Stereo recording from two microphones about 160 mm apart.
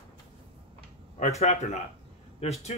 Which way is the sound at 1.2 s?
45° left (ahead or behind).